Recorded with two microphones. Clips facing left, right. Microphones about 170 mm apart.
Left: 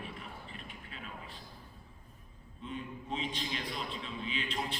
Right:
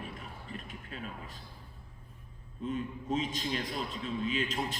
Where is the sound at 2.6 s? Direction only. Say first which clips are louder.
Right 6 dB; 45° right (ahead or behind).